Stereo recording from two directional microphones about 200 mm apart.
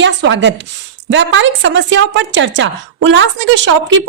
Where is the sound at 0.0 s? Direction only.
65° right (ahead or behind).